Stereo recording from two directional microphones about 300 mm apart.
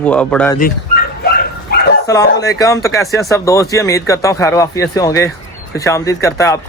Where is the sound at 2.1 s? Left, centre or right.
Centre.